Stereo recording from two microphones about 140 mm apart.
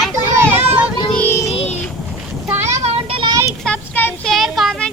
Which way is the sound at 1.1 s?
15° left (ahead or behind).